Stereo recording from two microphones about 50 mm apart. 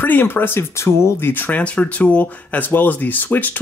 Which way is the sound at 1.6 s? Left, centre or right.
Left.